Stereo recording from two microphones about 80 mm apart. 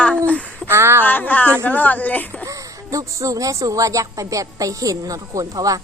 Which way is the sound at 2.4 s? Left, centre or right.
Right.